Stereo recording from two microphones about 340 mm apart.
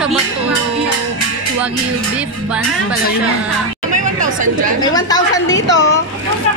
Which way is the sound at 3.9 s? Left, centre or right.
Right.